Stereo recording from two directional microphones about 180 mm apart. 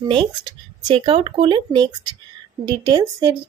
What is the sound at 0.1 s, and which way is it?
Speech, 25° right (ahead or behind).